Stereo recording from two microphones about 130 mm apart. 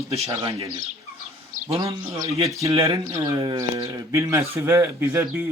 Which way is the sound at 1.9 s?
25° right (ahead or behind).